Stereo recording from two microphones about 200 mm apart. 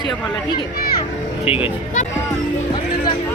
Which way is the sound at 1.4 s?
30° left (ahead or behind).